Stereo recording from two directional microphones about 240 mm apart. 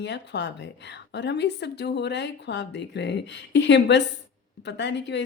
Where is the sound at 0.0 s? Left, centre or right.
Left.